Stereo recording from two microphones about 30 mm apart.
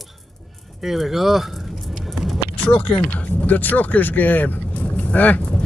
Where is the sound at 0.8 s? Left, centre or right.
Centre.